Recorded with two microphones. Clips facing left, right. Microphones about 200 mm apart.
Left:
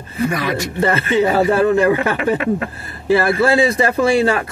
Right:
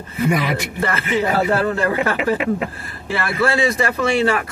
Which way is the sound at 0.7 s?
25° left (ahead or behind).